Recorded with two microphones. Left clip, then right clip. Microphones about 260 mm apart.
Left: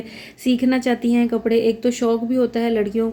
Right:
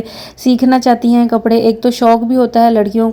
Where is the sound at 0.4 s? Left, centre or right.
Right.